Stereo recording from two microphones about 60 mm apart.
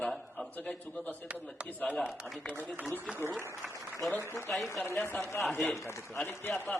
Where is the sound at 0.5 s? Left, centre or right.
Left.